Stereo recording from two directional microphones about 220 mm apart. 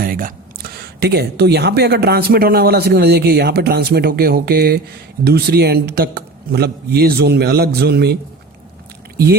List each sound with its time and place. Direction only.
0.0 s speech: 40° right (ahead or behind)